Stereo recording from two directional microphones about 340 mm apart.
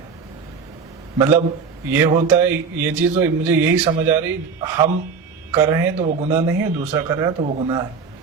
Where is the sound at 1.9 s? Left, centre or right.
Centre.